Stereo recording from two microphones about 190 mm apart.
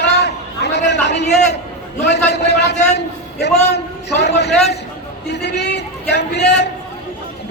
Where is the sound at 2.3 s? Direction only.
65° left (ahead or behind).